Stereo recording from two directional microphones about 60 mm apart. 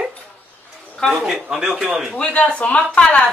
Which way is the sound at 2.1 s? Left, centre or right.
Left.